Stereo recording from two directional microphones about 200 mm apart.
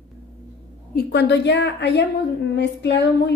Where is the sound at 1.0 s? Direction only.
60° left (ahead or behind).